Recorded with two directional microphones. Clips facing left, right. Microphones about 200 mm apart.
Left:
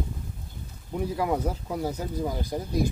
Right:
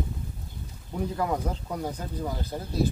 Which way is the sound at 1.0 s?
10° left (ahead or behind).